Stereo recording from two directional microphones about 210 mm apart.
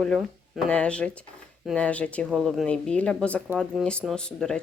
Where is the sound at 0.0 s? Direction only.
Centre (ahead or behind).